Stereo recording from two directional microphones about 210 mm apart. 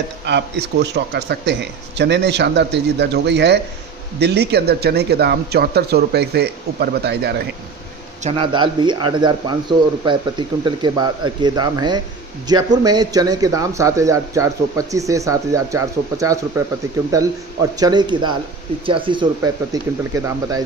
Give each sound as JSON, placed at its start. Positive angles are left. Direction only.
{"t": 0.2, "sound": "a man's voice", "side_deg": -55}
{"t": 8.2, "sound": "speech", "side_deg": -30}